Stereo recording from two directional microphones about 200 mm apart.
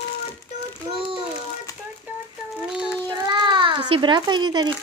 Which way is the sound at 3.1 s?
20° right (ahead or behind).